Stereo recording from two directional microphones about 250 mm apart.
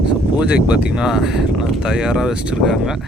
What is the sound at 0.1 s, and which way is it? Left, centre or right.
Speech, centre.